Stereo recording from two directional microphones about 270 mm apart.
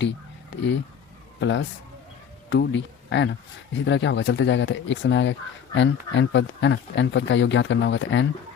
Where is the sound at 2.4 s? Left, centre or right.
Left.